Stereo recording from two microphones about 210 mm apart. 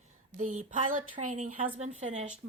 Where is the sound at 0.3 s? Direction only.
35° right (ahead or behind).